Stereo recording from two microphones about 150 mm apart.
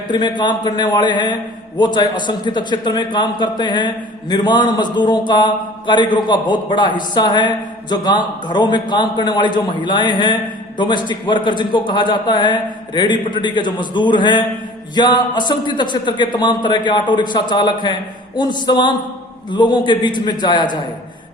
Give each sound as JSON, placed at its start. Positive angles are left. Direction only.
{"t": 0.1, "sound": "a man's voice", "side_deg": 30}